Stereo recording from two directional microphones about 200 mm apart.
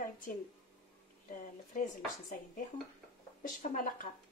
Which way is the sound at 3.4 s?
45° left (ahead or behind).